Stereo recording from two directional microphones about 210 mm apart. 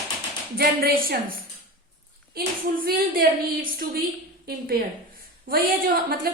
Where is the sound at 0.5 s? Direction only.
45° right (ahead or behind).